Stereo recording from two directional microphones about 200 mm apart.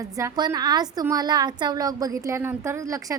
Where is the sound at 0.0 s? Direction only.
15° right (ahead or behind).